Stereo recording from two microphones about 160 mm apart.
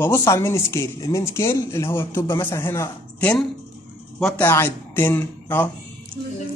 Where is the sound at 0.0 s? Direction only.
15° left (ahead or behind).